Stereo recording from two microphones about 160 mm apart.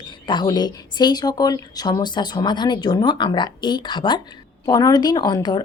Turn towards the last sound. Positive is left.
turn(degrees=25)  # may be behind; listen again after turning